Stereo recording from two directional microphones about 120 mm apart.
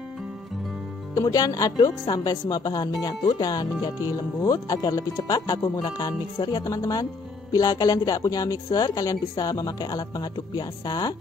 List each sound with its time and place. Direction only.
1.1 s a woman's voice: 30° left (ahead or behind)